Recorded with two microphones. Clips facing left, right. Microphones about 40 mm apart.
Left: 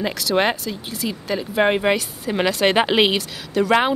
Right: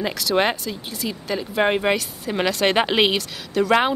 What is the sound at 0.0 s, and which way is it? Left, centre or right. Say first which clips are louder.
Speech: left 1 dB; centre.